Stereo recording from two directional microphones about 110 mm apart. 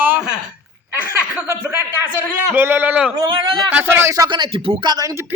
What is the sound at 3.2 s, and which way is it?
Speech, 45° right (ahead or behind).